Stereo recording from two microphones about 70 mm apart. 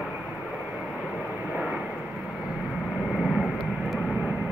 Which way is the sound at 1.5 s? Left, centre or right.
Centre.